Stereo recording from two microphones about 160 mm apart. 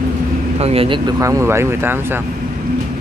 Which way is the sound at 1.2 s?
20° right (ahead or behind).